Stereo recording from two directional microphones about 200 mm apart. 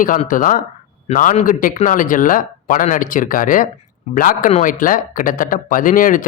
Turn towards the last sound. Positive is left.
turn(degrees=45)  # may be behind; listen again after turning